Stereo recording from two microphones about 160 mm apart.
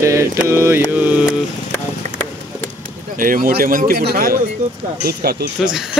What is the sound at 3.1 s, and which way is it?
Speech, 60° right (ahead or behind).